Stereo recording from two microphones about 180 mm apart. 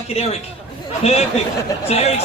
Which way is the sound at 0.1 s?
35° left (ahead or behind).